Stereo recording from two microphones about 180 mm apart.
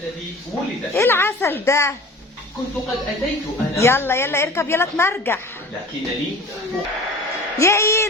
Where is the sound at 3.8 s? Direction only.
15° left (ahead or behind).